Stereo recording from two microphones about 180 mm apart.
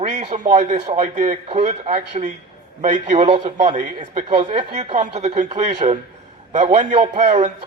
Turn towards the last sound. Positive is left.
turn(degrees=-45)  # may be behind; listen again after turning